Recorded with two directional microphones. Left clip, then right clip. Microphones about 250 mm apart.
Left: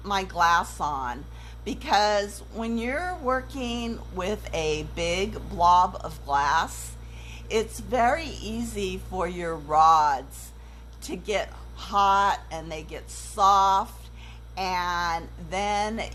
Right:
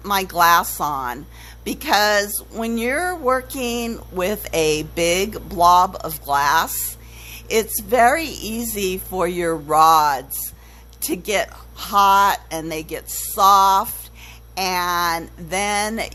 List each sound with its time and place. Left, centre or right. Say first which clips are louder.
0.0 s speech: right 7 dB; right